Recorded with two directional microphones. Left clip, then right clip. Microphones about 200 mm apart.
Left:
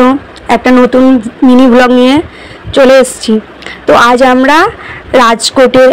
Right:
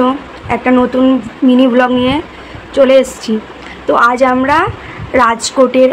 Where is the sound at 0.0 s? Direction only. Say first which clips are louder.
Left 6 dB; 30° left (ahead or behind).